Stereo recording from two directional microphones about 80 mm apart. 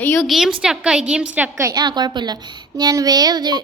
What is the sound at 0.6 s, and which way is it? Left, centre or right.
Speech, centre.